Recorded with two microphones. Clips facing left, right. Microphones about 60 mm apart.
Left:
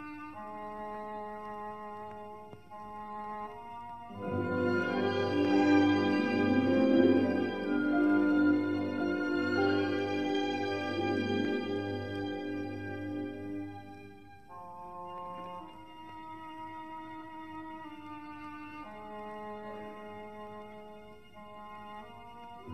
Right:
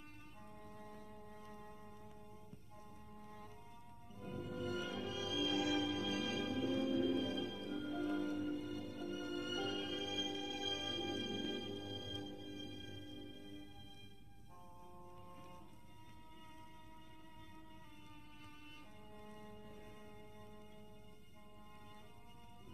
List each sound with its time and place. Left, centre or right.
0.0 s brass instrument: left
15.0 s music: left
16.6 s music: left
19.1 s music: left